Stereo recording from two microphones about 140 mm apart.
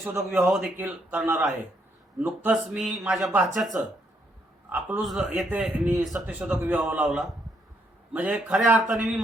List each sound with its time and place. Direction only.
0.0 s speech: 15° right (ahead or behind)